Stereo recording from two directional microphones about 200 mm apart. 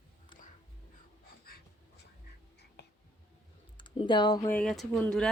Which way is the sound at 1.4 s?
50° left (ahead or behind).